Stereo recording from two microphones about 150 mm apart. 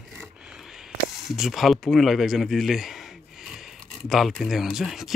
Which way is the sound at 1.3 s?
Centre (ahead or behind).